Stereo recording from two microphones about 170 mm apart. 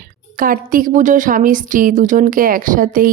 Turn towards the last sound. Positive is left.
turn(degrees=-55)  # may be behind; listen again after turning